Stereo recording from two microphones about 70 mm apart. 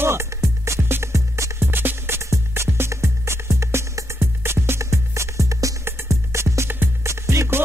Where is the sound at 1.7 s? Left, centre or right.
Right.